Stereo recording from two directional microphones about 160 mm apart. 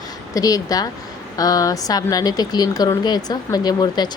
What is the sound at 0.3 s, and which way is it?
Speech, 20° left (ahead or behind).